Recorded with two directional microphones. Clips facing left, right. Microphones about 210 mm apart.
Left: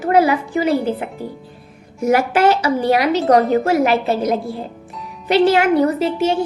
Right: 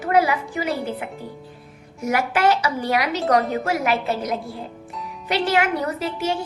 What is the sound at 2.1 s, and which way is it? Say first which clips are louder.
A woman's voice: left 5 dB; 30° left (ahead or behind).